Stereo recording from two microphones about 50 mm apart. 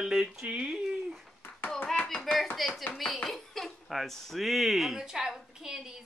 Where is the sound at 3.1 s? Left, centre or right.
Centre.